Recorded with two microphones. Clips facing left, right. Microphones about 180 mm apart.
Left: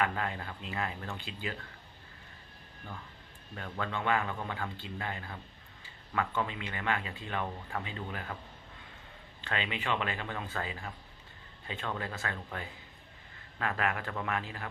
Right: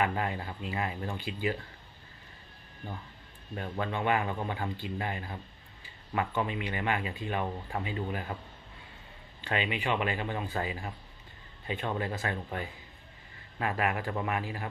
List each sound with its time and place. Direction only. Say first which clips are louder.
0.0 s speech: right 2 dB; 15° right (ahead or behind)
3.5 s a man's voice: right 3 dB; 20° right (ahead or behind)
9.4 s a man's voice: right 4 dB; 15° right (ahead or behind)